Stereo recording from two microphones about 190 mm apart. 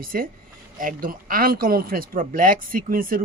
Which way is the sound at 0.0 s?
50° right (ahead or behind).